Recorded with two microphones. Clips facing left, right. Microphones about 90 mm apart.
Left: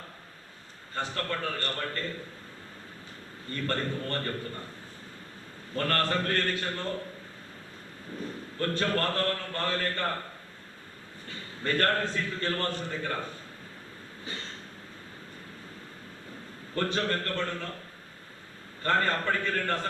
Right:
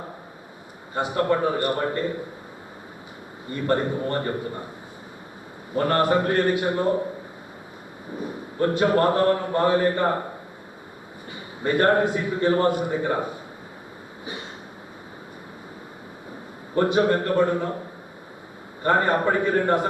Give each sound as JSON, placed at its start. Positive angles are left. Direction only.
{"t": 0.9, "sound": "a man's voice", "side_deg": -15}
{"t": 3.4, "sound": "a man's voice", "side_deg": -15}
{"t": 5.7, "sound": "a man's voice", "side_deg": -15}
{"t": 8.1, "sound": "a man's voice", "side_deg": -15}
{"t": 16.7, "sound": "a man's voice", "side_deg": -15}